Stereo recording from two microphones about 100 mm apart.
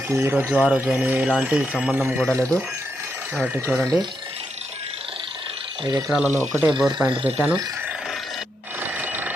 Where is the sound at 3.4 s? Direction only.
20° right (ahead or behind).